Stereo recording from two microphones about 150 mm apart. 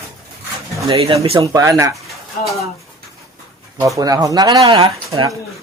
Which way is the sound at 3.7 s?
25° right (ahead or behind).